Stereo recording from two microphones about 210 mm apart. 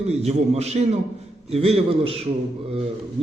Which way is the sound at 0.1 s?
30° right (ahead or behind).